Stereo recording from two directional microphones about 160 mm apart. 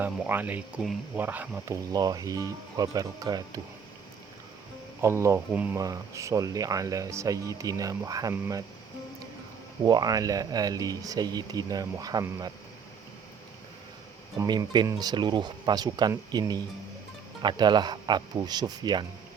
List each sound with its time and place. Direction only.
0.0 s speech: 10° right (ahead or behind)
4.9 s speech: 15° right (ahead or behind)
9.8 s speech: 25° right (ahead or behind)
14.3 s speech: 25° right (ahead or behind)